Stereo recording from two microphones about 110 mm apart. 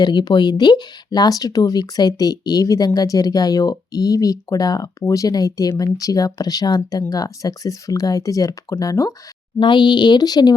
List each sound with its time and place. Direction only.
0.0 s speech: 45° left (ahead or behind)
9.6 s speech: 45° left (ahead or behind)